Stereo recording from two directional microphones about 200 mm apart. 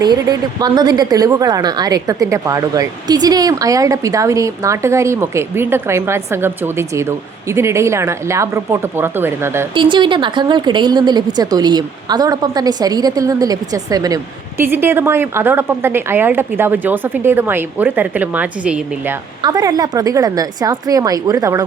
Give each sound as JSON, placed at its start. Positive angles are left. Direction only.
{"t": 0.0, "sound": "a woman's voice", "side_deg": -20}
{"t": 9.7, "sound": "a woman's voice", "side_deg": -25}
{"t": 19.4, "sound": "a woman's voice", "side_deg": -20}